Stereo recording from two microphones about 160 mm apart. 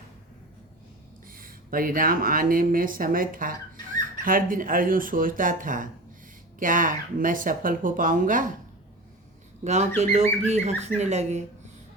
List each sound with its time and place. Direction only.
1.3 s speech: 65° right (ahead or behind)
10.0 s speech: 45° right (ahead or behind)